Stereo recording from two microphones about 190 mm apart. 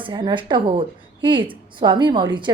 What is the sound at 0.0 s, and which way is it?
A woman's voice, 25° right (ahead or behind).